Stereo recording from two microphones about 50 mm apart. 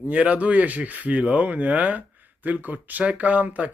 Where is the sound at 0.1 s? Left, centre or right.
Right.